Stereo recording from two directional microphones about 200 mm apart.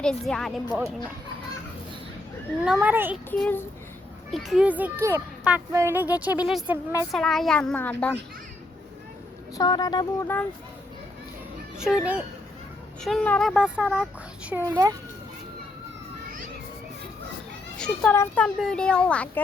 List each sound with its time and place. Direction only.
0.0 s speech: 5° left (ahead or behind)
2.6 s a woman's voice: 10° right (ahead or behind)
3.2 s child singing: 5° left (ahead or behind)
4.3 s a woman's voice: centre (ahead or behind)
7.1 s speech: centre (ahead or behind)
9.6 s speech: 20° left (ahead or behind)
11.8 s speech: centre (ahead or behind)
14.5 s a woman's voice: 15° right (ahead or behind)
17.7 s speech: 5° left (ahead or behind)